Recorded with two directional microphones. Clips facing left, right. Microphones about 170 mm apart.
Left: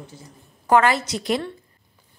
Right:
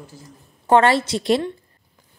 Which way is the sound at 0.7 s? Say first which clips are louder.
Right 2 dB; 30° right (ahead or behind).